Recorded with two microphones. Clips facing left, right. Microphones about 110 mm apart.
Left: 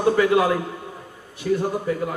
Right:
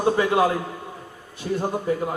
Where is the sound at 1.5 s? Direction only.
25° right (ahead or behind).